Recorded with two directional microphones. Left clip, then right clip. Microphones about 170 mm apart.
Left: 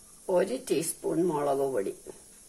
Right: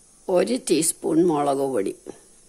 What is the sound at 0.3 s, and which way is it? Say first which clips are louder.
Speech: right 6 dB; 60° right (ahead or behind).